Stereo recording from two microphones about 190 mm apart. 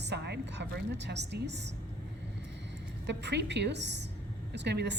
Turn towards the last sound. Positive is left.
turn(degrees=-65)  # may be behind; listen again after turning